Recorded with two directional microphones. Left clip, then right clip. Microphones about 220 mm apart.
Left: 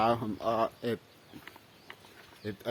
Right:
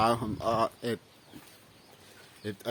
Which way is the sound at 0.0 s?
5° right (ahead or behind).